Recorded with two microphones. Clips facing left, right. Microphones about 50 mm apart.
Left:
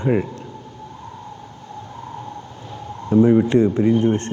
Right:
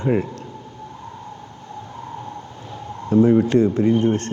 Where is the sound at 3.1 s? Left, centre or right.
Left.